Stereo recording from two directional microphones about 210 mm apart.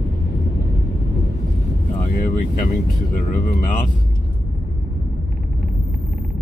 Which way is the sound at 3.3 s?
40° left (ahead or behind).